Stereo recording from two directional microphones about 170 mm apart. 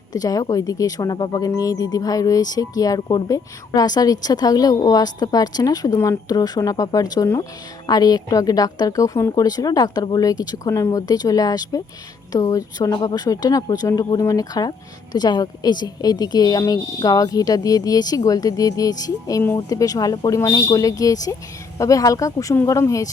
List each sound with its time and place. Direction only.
0.1 s speech: 20° left (ahead or behind)